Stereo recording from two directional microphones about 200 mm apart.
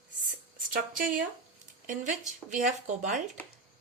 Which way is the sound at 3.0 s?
40° right (ahead or behind).